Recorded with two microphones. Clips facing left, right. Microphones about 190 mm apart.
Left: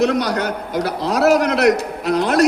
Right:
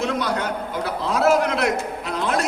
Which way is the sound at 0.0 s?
70° left (ahead or behind).